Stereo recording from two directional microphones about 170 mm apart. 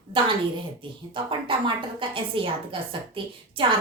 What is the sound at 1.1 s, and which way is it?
A woman's voice, 30° right (ahead or behind).